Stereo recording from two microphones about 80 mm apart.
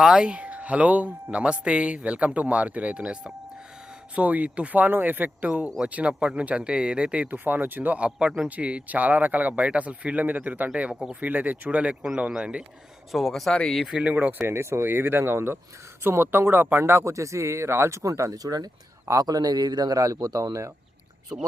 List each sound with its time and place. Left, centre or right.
0.0 s speech: centre
13.1 s speech: centre
13.8 s speech: centre
14.4 s speech: right